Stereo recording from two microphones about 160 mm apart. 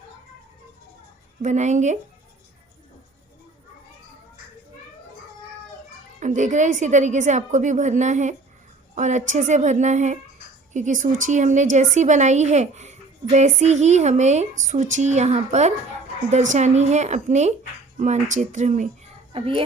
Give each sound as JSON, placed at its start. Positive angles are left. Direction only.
{"t": 1.4, "sound": "a woman's voice", "side_deg": -50}
{"t": 6.1, "sound": "a woman's voice", "side_deg": -50}
{"t": 19.3, "sound": "speech", "side_deg": -35}